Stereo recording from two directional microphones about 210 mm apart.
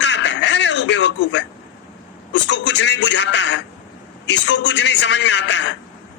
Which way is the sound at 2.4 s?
60° left (ahead or behind).